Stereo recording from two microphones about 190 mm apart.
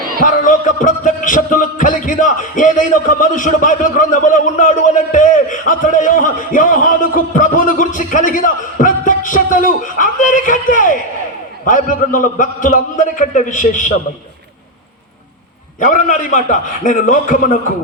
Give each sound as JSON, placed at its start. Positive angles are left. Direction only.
{"t": 0.2, "sound": "music", "side_deg": 45}
{"t": 15.8, "sound": "music", "side_deg": 45}